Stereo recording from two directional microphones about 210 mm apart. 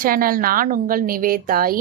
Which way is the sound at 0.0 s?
45° right (ahead or behind).